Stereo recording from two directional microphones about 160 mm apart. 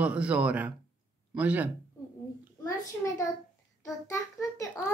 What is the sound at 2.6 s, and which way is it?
A child's voice, 20° left (ahead or behind).